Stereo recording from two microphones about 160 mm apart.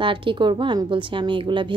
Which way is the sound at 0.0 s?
30° right (ahead or behind).